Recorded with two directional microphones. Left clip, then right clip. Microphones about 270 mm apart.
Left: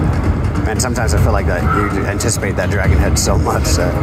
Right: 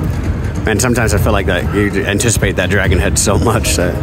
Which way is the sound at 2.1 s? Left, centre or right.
Right.